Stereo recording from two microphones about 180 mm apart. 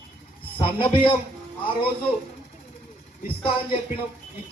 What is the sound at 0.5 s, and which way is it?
Speech, 30° left (ahead or behind).